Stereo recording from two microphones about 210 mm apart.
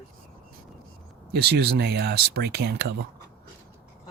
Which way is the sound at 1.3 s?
50° right (ahead or behind).